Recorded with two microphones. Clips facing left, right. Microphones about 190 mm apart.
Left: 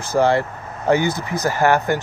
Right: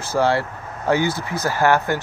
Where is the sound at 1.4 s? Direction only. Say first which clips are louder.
Left 1 dB; 15° left (ahead or behind).